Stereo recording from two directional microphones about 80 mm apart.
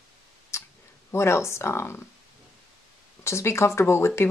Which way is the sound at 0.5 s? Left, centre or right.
Left.